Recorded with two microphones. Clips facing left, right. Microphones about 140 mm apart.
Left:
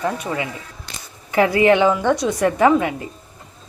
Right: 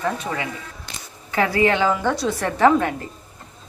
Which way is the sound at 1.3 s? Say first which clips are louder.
Left 4 dB; 20° left (ahead or behind).